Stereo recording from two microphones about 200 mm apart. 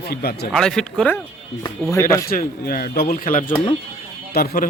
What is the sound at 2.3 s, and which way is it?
A man's voice, 45° left (ahead or behind).